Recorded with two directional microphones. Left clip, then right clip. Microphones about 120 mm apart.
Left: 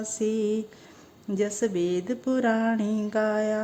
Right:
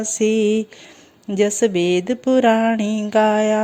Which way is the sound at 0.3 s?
15° right (ahead or behind).